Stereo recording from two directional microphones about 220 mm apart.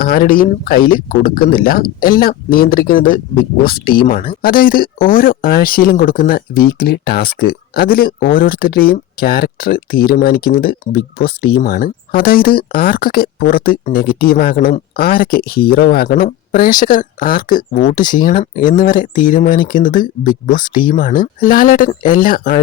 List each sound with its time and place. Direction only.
0.0 s speech: 45° left (ahead or behind)